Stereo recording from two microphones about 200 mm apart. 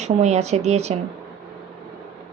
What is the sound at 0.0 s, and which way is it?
Speech, 35° right (ahead or behind).